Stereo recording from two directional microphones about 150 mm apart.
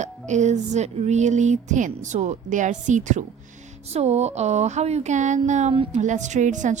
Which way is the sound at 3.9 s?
45° right (ahead or behind).